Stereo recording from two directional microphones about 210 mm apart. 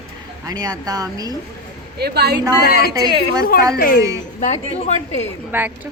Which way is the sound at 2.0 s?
50° right (ahead or behind).